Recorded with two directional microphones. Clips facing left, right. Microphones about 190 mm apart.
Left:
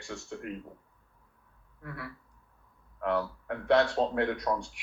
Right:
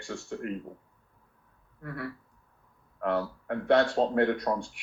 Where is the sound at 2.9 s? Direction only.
50° right (ahead or behind).